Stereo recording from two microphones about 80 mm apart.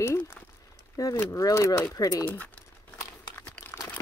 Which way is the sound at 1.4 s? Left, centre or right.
Left.